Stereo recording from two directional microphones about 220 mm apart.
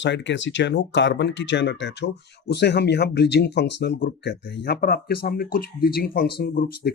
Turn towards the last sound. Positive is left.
turn(degrees=40)  # may be behind; listen again after turning